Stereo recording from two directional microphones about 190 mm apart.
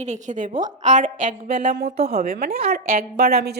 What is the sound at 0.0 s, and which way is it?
A woman's voice, 40° right (ahead or behind).